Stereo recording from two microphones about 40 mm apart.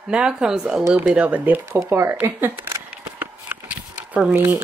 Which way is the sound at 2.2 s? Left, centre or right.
Right.